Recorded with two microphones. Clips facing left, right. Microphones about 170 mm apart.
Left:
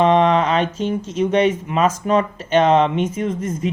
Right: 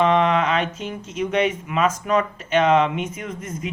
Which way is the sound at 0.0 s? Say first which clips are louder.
Left 3 dB; 35° left (ahead or behind).